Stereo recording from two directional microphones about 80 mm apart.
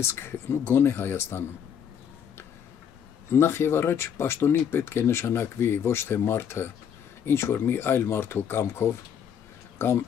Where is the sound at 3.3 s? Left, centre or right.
Left.